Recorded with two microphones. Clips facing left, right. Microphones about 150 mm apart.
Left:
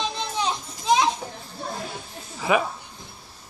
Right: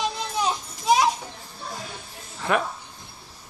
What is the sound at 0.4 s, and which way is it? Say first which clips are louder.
Children playing: right 2 dB; 10° right (ahead or behind).